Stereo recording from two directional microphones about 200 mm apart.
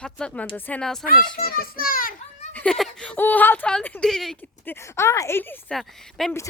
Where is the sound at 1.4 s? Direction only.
50° left (ahead or behind).